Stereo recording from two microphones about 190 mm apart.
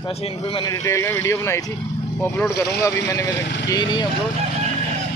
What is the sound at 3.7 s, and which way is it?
Speech, 25° left (ahead or behind).